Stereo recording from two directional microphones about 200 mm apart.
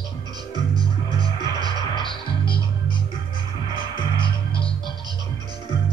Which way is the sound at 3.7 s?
25° left (ahead or behind).